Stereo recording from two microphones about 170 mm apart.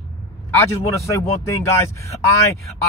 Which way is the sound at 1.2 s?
15° left (ahead or behind).